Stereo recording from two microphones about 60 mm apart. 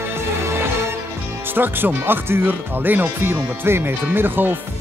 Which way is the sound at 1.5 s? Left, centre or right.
Right.